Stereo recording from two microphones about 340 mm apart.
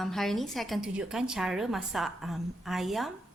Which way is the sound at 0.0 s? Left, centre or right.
Centre.